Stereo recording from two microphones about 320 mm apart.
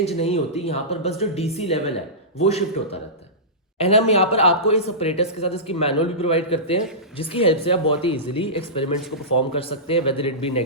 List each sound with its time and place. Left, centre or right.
0.2 s speech: centre
3.8 s speech: centre